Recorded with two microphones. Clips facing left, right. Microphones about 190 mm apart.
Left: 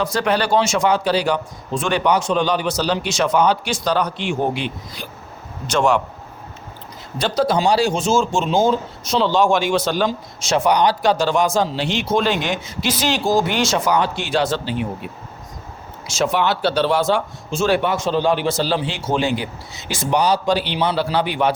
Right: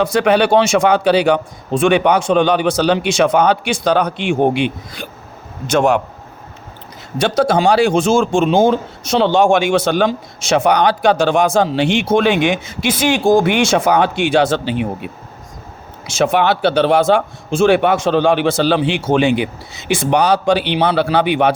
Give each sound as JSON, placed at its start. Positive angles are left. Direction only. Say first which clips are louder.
{"t": 0.0, "sound": "speech", "louder": "right 6 dB", "side_deg": -60}
{"t": 5.6, "sound": "speech", "louder": "right 4 dB", "side_deg": -55}
{"t": 7.2, "sound": "speech", "louder": "right 4 dB", "side_deg": -75}